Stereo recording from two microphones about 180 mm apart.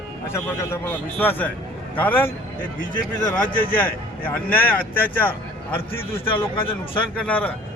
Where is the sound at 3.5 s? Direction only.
50° left (ahead or behind).